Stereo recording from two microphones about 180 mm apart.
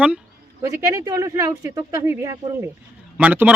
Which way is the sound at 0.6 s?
15° right (ahead or behind).